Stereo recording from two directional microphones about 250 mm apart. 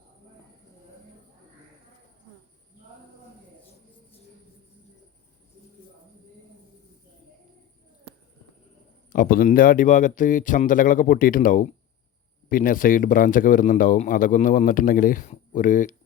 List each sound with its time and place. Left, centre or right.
9.1 s a man's voice: left